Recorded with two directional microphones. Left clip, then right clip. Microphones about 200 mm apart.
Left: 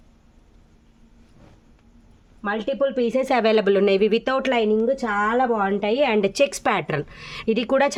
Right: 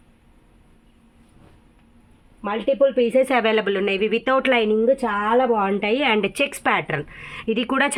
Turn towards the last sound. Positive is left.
turn(degrees=15)  # may be behind; listen again after turning